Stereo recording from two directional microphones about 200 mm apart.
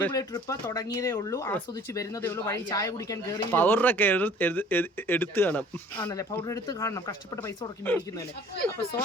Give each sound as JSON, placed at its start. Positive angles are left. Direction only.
{"t": 0.1, "sound": "speech", "side_deg": 20}